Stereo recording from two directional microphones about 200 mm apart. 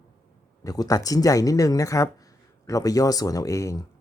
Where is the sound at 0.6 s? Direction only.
15° left (ahead or behind).